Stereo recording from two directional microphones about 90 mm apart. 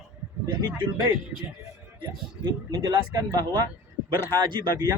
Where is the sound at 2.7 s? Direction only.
50° right (ahead or behind).